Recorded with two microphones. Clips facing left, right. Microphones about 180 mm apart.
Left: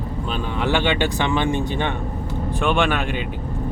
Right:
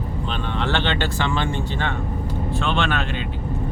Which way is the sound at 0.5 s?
10° left (ahead or behind).